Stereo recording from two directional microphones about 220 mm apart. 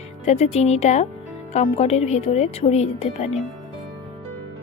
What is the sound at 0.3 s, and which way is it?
A woman's voice, 30° left (ahead or behind).